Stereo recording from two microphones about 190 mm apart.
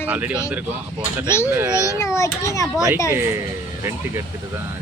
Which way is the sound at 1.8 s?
15° left (ahead or behind).